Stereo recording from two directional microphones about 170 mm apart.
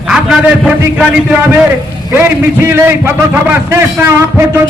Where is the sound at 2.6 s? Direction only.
15° right (ahead or behind).